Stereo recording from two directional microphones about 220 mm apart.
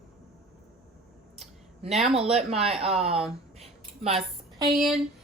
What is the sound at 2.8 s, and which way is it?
Speech, 30° right (ahead or behind).